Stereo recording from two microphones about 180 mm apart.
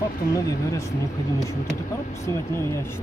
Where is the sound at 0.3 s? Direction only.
20° left (ahead or behind).